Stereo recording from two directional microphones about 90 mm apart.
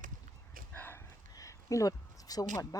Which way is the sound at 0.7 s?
25° left (ahead or behind).